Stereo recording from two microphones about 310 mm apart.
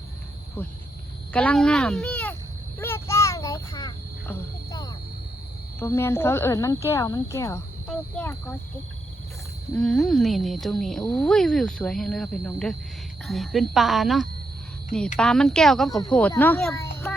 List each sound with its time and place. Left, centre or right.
1.3 s speech: centre
2.7 s a sound: centre
5.8 s speech: centre
9.7 s speech: centre